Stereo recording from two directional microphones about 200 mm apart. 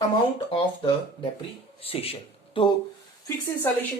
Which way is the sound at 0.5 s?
30° left (ahead or behind).